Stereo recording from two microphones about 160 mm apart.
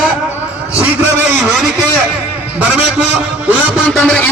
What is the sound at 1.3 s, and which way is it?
Vehicle, 5° right (ahead or behind).